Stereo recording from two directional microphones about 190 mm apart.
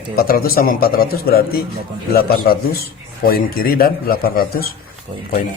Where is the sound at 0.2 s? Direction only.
50° left (ahead or behind).